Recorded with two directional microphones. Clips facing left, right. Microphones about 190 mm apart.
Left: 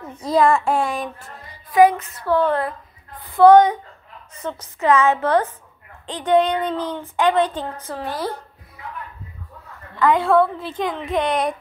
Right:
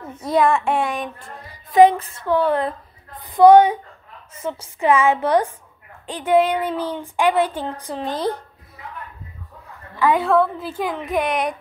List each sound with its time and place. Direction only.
0.1 s a child's voice: centre (ahead or behind)
1.7 s a woman's voice: 20° right (ahead or behind)
9.9 s a woman's voice: 10° right (ahead or behind)